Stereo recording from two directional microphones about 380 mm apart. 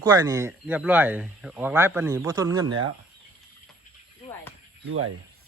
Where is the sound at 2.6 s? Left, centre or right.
Right.